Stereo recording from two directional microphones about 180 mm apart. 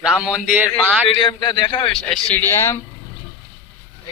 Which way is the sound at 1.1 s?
30° left (ahead or behind).